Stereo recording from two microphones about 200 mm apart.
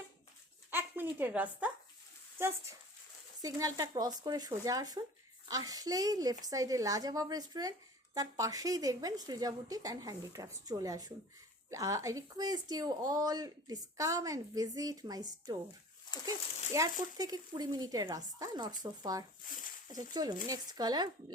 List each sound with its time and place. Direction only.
0.7 s a woman's voice: 10° right (ahead or behind)
3.4 s a woman's voice: 15° right (ahead or behind)
16.7 s speech: 15° right (ahead or behind)